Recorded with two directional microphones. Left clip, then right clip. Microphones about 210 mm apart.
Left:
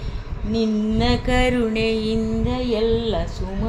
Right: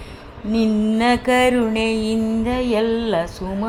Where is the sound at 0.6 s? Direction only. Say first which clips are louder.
Right 4 dB; 15° right (ahead or behind).